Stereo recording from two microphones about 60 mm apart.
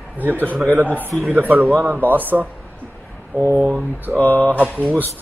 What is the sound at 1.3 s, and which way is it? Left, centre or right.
A man's voice, right.